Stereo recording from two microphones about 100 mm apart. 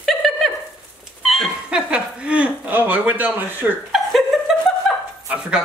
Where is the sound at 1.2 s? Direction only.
Centre (ahead or behind).